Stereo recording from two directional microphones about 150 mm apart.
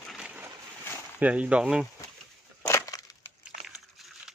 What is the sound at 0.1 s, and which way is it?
Boat, 5° right (ahead or behind).